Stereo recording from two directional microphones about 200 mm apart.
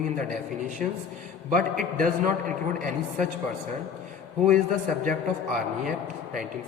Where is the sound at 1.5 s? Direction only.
40° right (ahead or behind).